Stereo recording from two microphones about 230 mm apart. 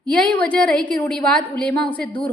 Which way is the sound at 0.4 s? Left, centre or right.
Centre.